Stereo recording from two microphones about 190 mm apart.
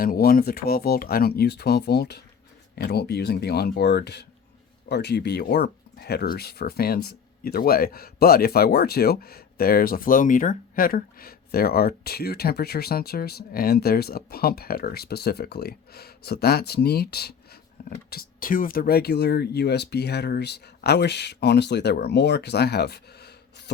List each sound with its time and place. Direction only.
0.0 s speech: 50° left (ahead or behind)